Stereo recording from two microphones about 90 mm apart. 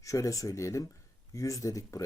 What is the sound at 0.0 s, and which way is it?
Speech, 35° left (ahead or behind).